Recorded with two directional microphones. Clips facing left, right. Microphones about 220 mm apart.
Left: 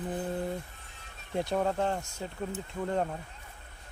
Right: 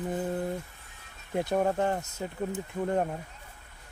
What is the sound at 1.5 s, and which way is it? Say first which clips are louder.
Speech: right 3 dB; 15° right (ahead or behind).